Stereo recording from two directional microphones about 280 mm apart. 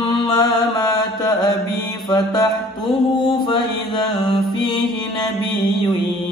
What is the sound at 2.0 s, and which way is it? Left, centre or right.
Music, centre.